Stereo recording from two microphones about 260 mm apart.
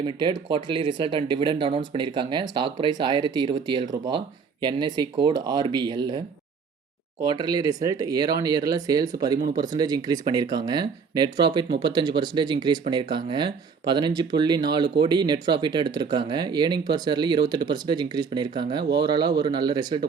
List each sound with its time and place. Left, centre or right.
0.0 s speech: centre